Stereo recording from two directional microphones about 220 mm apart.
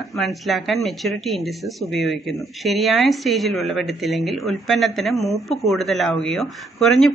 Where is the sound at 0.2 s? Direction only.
Centre (ahead or behind).